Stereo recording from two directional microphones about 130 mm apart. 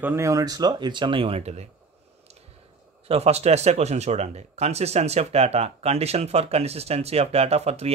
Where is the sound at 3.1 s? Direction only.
55° right (ahead or behind).